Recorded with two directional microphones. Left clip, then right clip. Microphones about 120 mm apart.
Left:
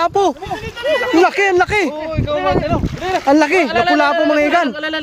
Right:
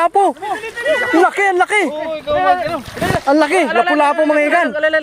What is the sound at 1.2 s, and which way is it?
Speech, 25° left (ahead or behind).